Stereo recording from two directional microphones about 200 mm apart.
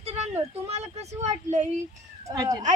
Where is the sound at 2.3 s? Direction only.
20° right (ahead or behind).